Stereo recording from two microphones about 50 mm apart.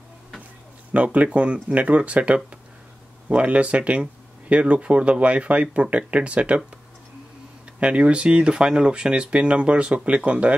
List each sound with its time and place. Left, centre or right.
0.9 s speech: right
7.8 s speech: right